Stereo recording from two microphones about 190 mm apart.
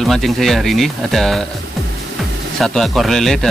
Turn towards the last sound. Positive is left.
turn(degrees=0)  # may be behind; listen again after turning